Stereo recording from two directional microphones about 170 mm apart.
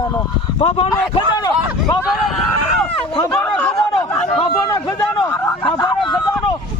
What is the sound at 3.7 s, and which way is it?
Chatter, 35° left (ahead or behind).